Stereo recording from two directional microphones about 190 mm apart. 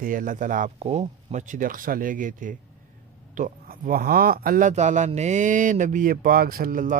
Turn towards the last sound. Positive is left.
turn(degrees=-45)  # may be behind; listen again after turning